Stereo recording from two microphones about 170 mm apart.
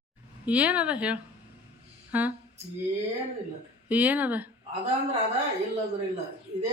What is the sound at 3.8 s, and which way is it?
Speech, 10° right (ahead or behind).